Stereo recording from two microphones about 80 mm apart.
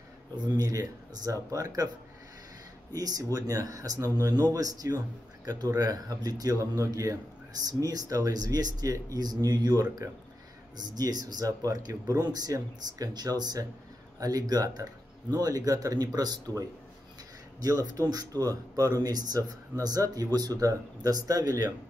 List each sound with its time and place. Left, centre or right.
0.6 s speech: right
2.9 s speech: right
12.2 s speech: right